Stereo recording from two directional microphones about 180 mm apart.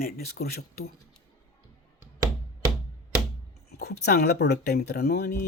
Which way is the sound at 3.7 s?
65° left (ahead or behind).